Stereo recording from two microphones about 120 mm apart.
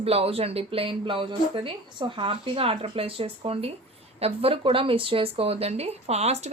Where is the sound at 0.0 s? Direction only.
55° right (ahead or behind).